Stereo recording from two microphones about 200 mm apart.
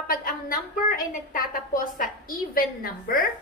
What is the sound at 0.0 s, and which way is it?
A woman's voice, 45° left (ahead or behind).